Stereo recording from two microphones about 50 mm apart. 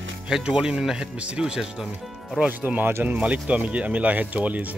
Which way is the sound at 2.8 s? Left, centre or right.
Right.